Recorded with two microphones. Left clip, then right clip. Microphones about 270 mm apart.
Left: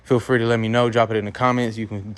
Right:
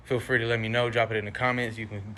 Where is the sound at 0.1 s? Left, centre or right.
Left.